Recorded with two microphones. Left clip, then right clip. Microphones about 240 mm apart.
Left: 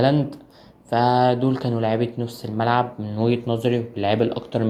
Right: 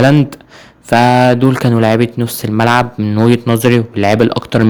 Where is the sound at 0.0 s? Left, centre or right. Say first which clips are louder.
Right 9 dB; right.